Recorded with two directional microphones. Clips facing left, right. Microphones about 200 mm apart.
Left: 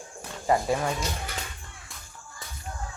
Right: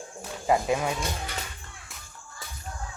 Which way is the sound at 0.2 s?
5° right (ahead or behind).